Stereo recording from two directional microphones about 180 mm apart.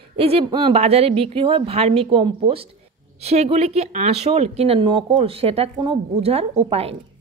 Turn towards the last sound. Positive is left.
turn(degrees=-35)  # may be behind; listen again after turning